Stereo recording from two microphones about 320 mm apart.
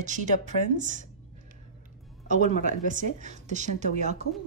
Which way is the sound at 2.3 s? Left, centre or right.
Right.